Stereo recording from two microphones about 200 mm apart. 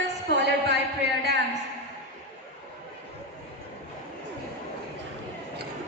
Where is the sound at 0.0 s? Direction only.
60° right (ahead or behind).